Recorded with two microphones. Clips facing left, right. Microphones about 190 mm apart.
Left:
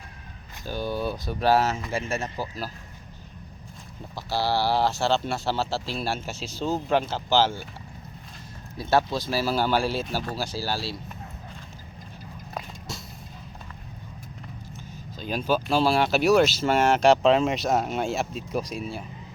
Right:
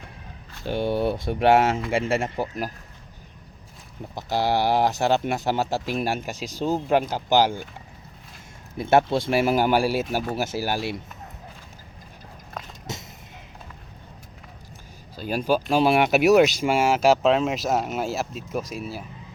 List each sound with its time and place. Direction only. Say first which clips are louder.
0.6 s speech: right 5 dB; 25° right (ahead or behind)
4.1 s speech: right 3 dB; 20° right (ahead or behind)
8.8 s speech: right 4 dB; 25° right (ahead or behind)
15.1 s speech: right 2 dB; 10° right (ahead or behind)
16.4 s speech: right 2 dB; 10° right (ahead or behind)